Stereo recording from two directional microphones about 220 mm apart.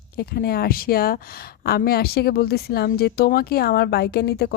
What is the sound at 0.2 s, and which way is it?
Speech, 45° left (ahead or behind).